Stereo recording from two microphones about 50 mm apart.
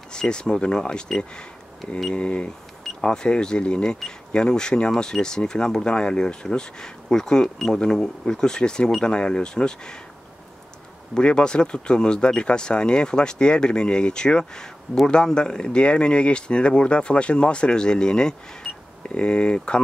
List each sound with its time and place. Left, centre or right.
0.1 s speech: centre
11.1 s speech: centre